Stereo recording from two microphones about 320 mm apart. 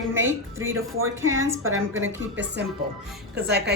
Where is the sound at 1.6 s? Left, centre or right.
Right.